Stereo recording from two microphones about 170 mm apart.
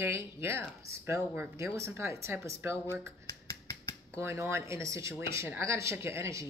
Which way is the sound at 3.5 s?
20° left (ahead or behind).